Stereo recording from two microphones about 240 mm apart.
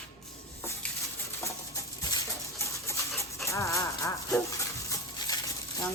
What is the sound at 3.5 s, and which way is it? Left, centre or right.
Dog, centre.